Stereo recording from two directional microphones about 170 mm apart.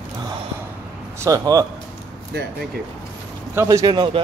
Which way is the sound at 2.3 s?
80° right.